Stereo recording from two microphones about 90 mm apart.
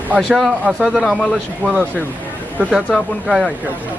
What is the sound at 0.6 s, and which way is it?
Speech, 10° right (ahead or behind).